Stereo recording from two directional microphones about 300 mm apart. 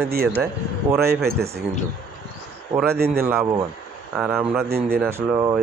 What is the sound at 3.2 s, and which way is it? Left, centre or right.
Speech, centre.